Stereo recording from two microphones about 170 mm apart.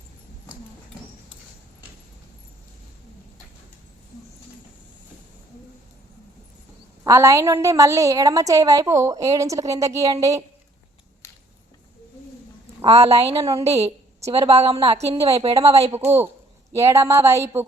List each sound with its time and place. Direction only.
7.0 s a woman's voice: 20° right (ahead or behind)
12.8 s a woman's voice: 35° right (ahead or behind)
13.4 s a woman's voice: 20° right (ahead or behind)
14.3 s a woman's voice: 35° right (ahead or behind)
16.0 s speech: 15° right (ahead or behind)